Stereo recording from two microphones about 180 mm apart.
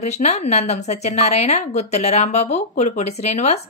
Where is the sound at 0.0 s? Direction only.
35° left (ahead or behind).